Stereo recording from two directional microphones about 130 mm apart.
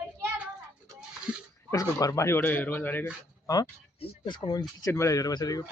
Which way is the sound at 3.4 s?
30° left (ahead or behind).